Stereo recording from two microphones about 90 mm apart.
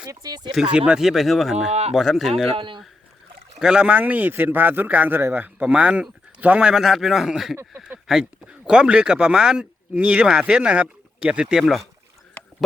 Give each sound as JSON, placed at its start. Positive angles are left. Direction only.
{"t": 0.0, "sound": "speech", "side_deg": -45}
{"t": 0.5, "sound": "speech", "side_deg": -10}
{"t": 2.6, "sound": "speech", "side_deg": -65}
{"t": 3.6, "sound": "speech", "side_deg": -10}
{"t": 7.5, "sound": "speech", "side_deg": -25}
{"t": 8.0, "sound": "speech", "side_deg": -5}